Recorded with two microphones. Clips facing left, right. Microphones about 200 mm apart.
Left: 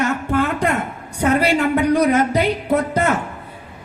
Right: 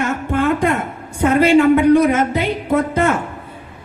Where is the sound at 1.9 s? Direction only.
35° left (ahead or behind).